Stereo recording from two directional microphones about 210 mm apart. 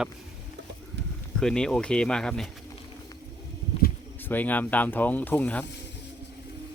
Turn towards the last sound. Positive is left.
turn(degrees=5)  # may be behind; listen again after turning